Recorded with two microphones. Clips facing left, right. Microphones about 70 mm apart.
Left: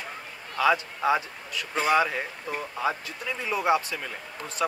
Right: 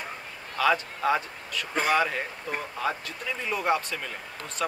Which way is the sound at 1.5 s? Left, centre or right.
Right.